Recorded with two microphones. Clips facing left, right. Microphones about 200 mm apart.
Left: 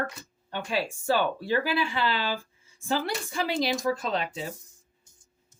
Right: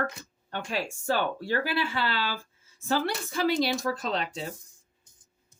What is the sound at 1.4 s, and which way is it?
Speech, 15° left (ahead or behind).